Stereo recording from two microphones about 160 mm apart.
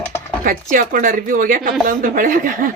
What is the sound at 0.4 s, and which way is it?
Speech, 55° right (ahead or behind).